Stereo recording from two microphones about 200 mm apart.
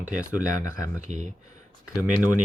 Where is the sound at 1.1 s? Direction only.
40° right (ahead or behind).